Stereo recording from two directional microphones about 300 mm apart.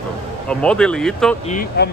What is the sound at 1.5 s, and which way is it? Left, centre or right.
Speech, left.